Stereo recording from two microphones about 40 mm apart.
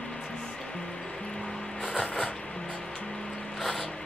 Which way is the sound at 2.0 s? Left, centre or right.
Left.